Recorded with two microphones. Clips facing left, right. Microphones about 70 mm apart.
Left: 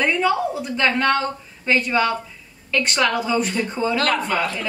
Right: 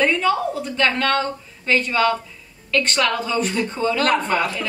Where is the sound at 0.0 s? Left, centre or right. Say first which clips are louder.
Right 1 dB; centre.